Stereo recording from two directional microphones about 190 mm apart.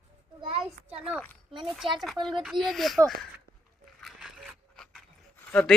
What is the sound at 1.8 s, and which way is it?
Speech, 25° right (ahead or behind).